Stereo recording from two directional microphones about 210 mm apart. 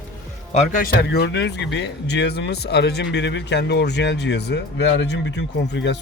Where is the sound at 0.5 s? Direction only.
40° left (ahead or behind).